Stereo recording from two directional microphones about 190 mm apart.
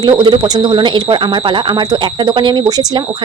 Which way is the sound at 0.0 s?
20° right (ahead or behind).